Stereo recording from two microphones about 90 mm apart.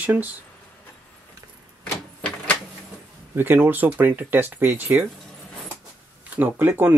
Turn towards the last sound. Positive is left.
turn(degrees=-20)  # may be behind; listen again after turning